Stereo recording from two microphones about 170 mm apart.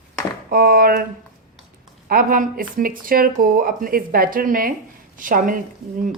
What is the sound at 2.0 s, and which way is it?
A woman's voice, 55° right (ahead or behind).